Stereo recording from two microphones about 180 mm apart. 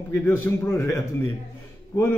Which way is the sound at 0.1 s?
15° left (ahead or behind).